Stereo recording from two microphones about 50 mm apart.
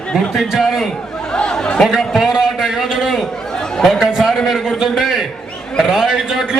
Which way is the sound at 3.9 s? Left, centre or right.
Centre.